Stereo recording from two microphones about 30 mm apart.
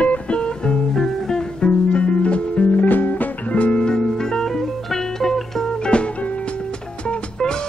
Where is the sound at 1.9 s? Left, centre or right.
Left.